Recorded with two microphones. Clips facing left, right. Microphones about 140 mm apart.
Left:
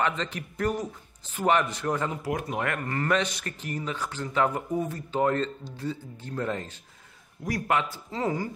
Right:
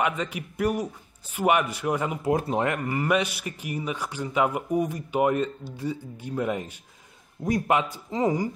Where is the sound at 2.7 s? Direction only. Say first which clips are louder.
Right 2 dB; 10° right (ahead or behind).